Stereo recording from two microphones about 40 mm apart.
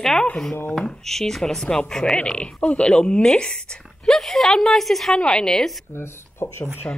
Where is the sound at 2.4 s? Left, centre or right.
Left.